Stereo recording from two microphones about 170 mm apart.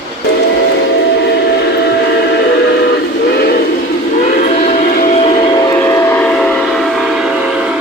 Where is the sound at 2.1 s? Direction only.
80° left.